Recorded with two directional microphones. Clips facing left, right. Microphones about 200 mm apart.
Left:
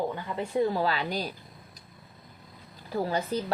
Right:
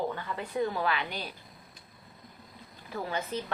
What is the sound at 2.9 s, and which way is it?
Speech, 35° left (ahead or behind).